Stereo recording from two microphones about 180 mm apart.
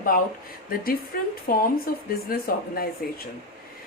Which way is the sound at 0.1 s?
55° left (ahead or behind).